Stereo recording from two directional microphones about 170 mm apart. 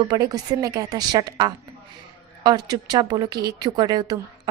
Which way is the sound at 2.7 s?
25° right (ahead or behind).